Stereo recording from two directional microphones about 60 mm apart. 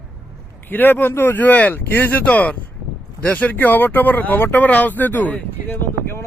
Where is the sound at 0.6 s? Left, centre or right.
Left.